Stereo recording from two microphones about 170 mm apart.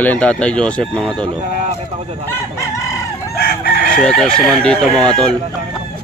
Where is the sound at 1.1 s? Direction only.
25° right (ahead or behind).